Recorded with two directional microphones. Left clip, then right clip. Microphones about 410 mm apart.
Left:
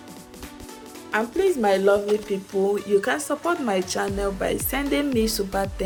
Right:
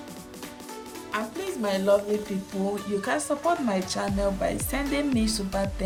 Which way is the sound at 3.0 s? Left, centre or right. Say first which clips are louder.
Left 1 dB; centre.